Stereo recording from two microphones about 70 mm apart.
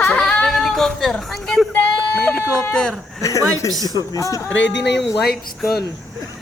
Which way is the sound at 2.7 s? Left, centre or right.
Centre.